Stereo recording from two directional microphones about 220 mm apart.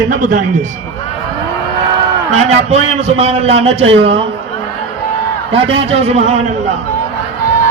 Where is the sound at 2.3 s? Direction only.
30° right (ahead or behind).